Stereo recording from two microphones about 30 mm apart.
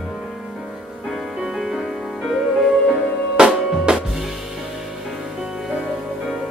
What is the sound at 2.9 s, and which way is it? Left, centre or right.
Music, right.